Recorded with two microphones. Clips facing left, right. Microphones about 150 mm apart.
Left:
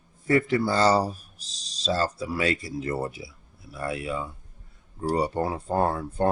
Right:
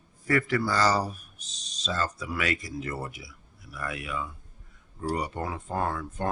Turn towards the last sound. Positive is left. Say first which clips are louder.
# left 6 dB
turn(degrees=30)  # may be behind; listen again after turning